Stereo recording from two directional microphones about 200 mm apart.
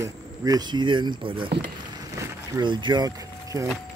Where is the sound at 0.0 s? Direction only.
15° right (ahead or behind).